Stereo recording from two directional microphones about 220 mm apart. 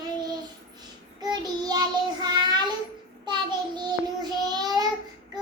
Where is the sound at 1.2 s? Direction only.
20° right (ahead or behind).